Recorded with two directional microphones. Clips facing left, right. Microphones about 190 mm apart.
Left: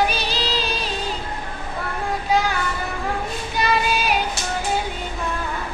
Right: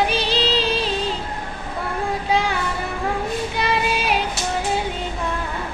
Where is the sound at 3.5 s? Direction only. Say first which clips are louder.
Left 3 dB; 25° right (ahead or behind).